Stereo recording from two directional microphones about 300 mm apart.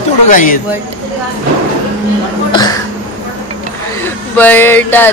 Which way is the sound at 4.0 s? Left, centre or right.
Centre.